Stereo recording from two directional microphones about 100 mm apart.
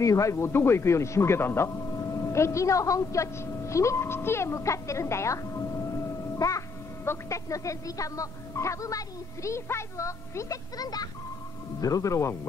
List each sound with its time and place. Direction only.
0.0 s speech: 30° left (ahead or behind)